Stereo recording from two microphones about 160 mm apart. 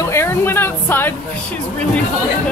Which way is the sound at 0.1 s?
15° left (ahead or behind).